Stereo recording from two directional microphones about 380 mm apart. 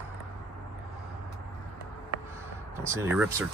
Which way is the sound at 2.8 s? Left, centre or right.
Centre.